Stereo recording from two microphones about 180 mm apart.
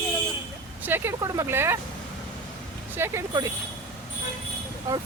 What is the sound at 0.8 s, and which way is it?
Speech, 10° right (ahead or behind).